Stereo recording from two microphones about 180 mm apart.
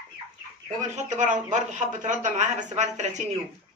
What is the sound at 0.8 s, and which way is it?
Speech, 45° right (ahead or behind).